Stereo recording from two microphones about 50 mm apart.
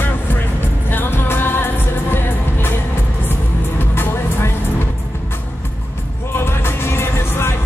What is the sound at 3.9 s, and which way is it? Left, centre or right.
Music, left.